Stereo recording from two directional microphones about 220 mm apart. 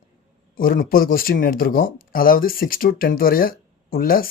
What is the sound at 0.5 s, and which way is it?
Speech, 40° left (ahead or behind).